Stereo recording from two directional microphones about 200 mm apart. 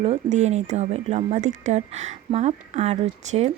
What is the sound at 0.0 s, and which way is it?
Speech, 35° right (ahead or behind).